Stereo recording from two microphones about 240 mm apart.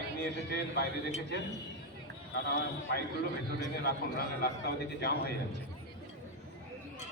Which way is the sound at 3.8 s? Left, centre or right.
Left.